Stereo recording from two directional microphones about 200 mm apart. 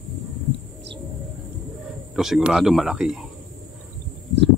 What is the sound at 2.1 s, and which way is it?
Speech, centre (ahead or behind).